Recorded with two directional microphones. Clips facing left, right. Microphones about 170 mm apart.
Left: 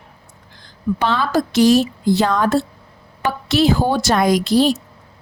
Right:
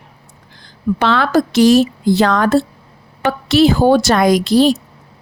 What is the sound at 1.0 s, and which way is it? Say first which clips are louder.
A woman's voice: right 5 dB; 75° right (ahead or behind).